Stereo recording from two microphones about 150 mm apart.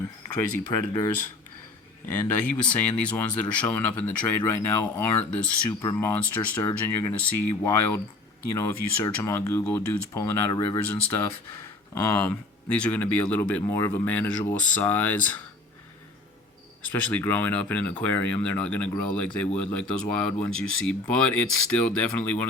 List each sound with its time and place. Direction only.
0.3 s speech: 15° left (ahead or behind)
0.7 s speech: 25° left (ahead or behind)
2.2 s speech: 10° left (ahead or behind)
12.1 s speech: 10° left (ahead or behind)
16.8 s speech: 10° left (ahead or behind)